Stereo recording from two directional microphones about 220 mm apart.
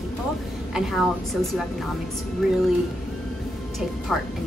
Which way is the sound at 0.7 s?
Centre (ahead or behind).